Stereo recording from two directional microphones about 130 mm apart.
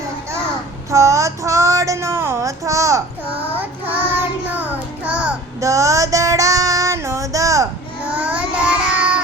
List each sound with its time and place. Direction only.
0.9 s child singing: 25° right (ahead or behind)
4.5 s music: 10° right (ahead or behind)
5.5 s female singing: 25° right (ahead or behind)
8.1 s child singing: 10° right (ahead or behind)